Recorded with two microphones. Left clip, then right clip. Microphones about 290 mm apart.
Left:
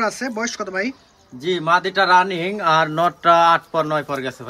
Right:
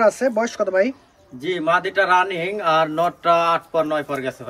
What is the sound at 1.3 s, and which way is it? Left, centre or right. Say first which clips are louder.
Speech: left 2 dB; centre.